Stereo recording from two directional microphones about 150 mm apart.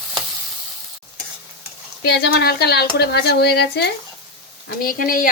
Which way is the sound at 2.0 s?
90° left.